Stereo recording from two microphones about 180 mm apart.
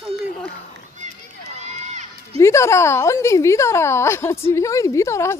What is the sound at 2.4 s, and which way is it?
A woman's voice, 15° left (ahead or behind).